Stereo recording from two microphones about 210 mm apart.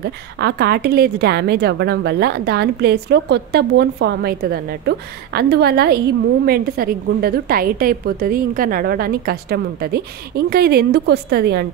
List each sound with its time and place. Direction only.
0.0 s a woman's voice: 50° right (ahead or behind)